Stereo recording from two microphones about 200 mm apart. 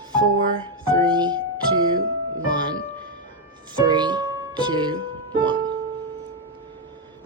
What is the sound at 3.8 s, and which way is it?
Music, 20° right (ahead or behind).